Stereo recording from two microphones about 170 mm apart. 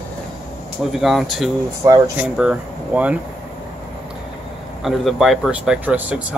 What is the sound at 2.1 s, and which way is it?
Speech, 5° right (ahead or behind).